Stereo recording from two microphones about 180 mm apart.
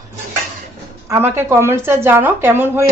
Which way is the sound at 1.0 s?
15° right (ahead or behind).